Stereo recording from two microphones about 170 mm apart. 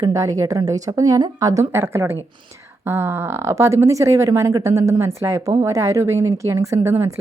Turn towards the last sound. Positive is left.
turn(degrees=-15)  # may be behind; listen again after turning